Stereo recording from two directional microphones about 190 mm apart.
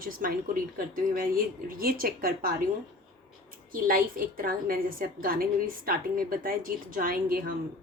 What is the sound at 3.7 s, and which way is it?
A woman's voice, 50° right (ahead or behind).